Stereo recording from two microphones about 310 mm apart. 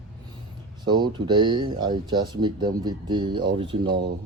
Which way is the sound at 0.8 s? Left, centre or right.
Centre.